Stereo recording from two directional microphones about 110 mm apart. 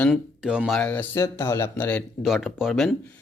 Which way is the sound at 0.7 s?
10° left (ahead or behind).